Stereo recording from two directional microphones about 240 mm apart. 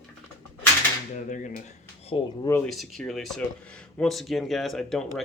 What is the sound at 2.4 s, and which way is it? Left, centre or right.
Speech, centre.